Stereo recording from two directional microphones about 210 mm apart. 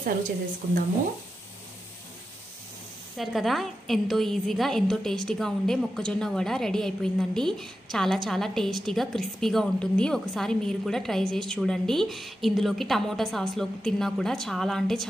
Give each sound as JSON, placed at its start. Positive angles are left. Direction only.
{"t": 3.2, "sound": "a woman's voice", "side_deg": 0}